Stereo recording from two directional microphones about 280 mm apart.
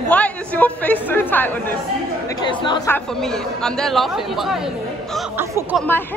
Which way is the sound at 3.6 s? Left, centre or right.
Centre.